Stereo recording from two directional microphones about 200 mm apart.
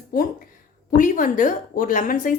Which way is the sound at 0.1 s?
45° left (ahead or behind).